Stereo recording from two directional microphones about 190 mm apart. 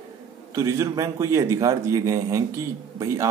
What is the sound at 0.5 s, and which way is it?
Speech, 15° right (ahead or behind).